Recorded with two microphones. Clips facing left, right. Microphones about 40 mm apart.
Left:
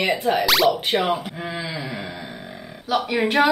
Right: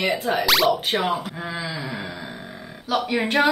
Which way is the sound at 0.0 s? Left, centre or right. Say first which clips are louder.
Left 2 dB; left.